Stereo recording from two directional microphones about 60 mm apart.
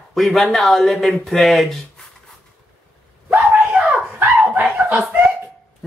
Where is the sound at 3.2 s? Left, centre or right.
Centre.